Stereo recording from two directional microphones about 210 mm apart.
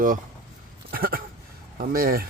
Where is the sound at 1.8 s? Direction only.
45° right (ahead or behind).